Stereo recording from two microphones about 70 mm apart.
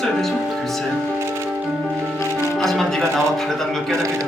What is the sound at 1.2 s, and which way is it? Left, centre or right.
Music, right.